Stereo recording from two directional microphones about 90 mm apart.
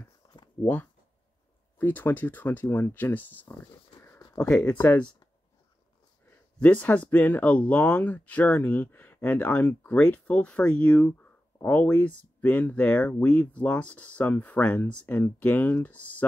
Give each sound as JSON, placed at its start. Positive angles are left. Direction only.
{"t": 0.2, "sound": "a sound", "side_deg": 55}
{"t": 1.8, "sound": "speech", "side_deg": 20}
{"t": 4.7, "sound": "speech", "side_deg": 20}
{"t": 6.6, "sound": "speech", "side_deg": 15}